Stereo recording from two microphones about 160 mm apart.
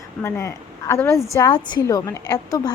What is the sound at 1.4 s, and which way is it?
Speech, 30° left (ahead or behind).